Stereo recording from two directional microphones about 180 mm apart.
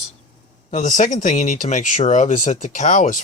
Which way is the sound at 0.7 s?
45° left (ahead or behind).